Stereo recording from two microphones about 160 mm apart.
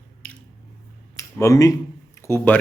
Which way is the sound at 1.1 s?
20° left (ahead or behind).